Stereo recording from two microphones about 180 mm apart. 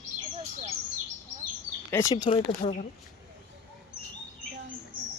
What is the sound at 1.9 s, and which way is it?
Speech, 20° left (ahead or behind).